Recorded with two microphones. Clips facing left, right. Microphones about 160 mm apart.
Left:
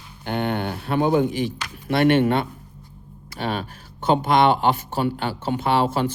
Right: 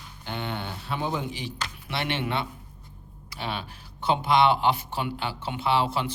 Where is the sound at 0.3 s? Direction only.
55° left (ahead or behind).